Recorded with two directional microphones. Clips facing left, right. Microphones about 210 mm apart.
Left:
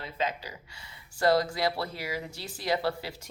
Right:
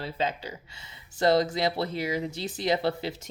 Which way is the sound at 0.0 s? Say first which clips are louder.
Right 2 dB; 30° right (ahead or behind).